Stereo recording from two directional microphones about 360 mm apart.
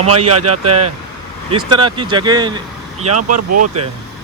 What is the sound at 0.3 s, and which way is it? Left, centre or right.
Speech, right.